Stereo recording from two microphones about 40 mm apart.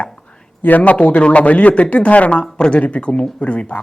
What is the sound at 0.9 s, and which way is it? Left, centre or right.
A man's voice, left.